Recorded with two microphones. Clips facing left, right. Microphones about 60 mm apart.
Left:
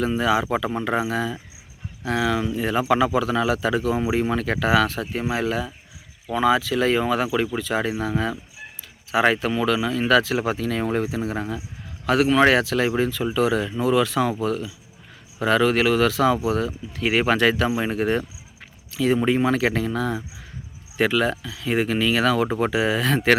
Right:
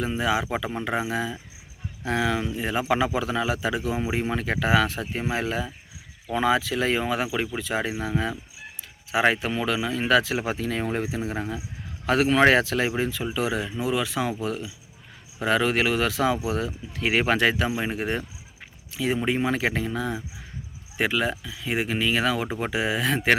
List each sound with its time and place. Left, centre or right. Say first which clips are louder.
0.0 s speech: left 4 dB; centre
2.0 s speech: left 2 dB; right
2.4 s speech: left 4 dB; centre
12.0 s speech: left 2 dB; right
17.8 s speech: left 5 dB; centre